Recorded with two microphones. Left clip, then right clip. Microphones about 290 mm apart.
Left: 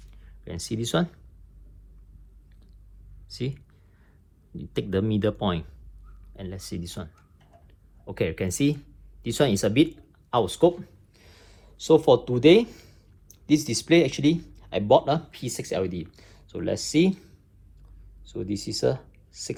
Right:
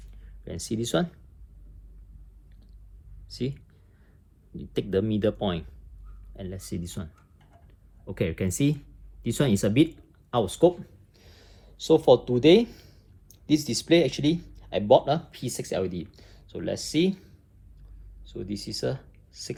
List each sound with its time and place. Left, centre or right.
0.4 s speech: centre
3.2 s speech: centre
4.7 s speech: centre
10.8 s a sound: centre
13.5 s speech: centre
18.3 s speech: centre